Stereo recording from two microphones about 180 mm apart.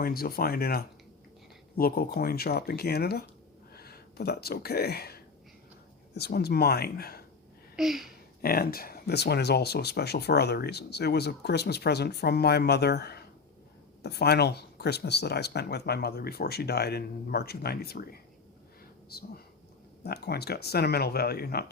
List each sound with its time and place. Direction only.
0.0 s speech: 55° left (ahead or behind)
7.8 s speech: centre (ahead or behind)
8.4 s speech: 55° left (ahead or behind)